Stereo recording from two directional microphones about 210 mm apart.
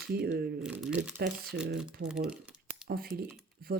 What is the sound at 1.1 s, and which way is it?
Speech, 50° right (ahead or behind).